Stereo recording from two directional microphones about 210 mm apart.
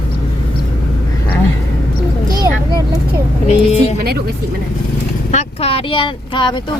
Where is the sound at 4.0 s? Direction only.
50° right (ahead or behind).